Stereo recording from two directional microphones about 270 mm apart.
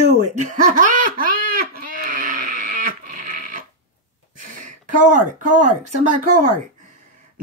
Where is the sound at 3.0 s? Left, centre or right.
Right.